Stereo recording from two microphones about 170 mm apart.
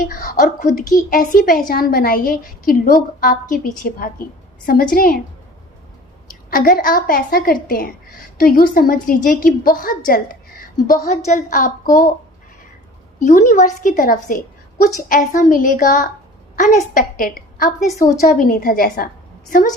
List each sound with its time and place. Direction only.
0.1 s a sound: 55° left (ahead or behind)
0.9 s a woman's voice: 55° left (ahead or behind)
6.5 s a woman's voice: 55° left (ahead or behind)
13.1 s a woman's voice: 45° left (ahead or behind)